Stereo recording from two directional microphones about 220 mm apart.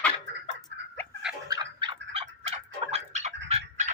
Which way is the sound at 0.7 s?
55° right (ahead or behind).